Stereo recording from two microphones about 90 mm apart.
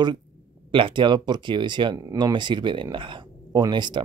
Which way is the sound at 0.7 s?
65° right (ahead or behind).